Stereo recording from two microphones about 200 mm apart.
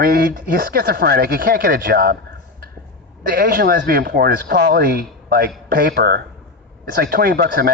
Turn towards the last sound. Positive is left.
turn(degrees=-55)  # may be behind; listen again after turning